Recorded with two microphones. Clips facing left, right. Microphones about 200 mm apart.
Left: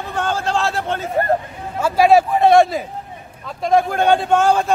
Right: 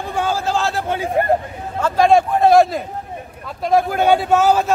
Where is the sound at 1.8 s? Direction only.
10° left (ahead or behind).